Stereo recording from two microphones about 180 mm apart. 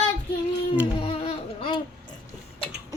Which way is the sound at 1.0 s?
30° left (ahead or behind).